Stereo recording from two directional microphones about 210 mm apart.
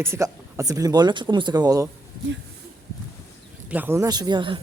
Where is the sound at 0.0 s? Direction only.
10° right (ahead or behind).